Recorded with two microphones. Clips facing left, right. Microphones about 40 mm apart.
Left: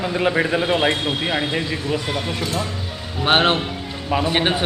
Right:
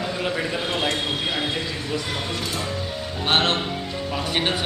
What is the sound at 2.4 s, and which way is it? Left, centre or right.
Speech, centre.